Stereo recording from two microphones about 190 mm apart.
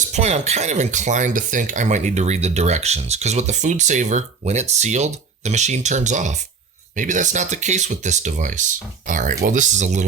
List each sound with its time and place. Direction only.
0.1 s speech: 35° right (ahead or behind)